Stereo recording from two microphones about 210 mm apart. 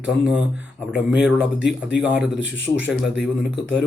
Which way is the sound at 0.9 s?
5° right (ahead or behind).